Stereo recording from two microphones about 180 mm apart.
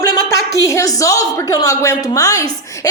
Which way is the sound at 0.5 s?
15° left (ahead or behind).